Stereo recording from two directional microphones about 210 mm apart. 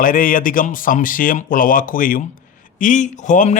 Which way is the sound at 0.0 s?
40° left (ahead or behind).